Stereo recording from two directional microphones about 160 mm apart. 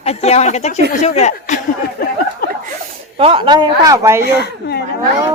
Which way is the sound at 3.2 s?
35° right (ahead or behind).